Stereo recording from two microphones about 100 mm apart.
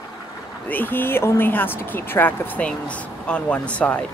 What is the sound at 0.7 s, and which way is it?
Speech, 20° left (ahead or behind).